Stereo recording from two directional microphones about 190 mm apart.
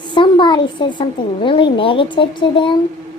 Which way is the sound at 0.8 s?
25° left (ahead or behind).